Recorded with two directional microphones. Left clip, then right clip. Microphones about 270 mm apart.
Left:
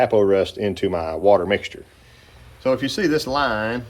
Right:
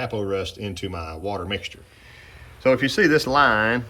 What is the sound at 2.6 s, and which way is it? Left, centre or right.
Speech, centre.